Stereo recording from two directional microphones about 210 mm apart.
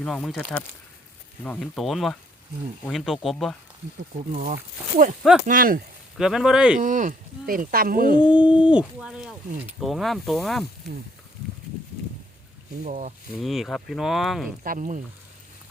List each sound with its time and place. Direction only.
0.0 s speech: centre (ahead or behind)
4.3 s speech: 35° right (ahead or behind)
6.1 s speech: centre (ahead or behind)
6.7 s speech: 40° right (ahead or behind)
8.3 s speech: 5° right (ahead or behind)
12.8 s speech: 35° right (ahead or behind)
13.4 s speech: centre (ahead or behind)
14.6 s speech: 40° right (ahead or behind)